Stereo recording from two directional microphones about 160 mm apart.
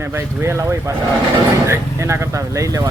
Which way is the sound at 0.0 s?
15° right (ahead or behind).